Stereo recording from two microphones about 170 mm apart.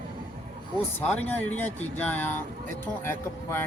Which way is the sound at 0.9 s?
10° left (ahead or behind).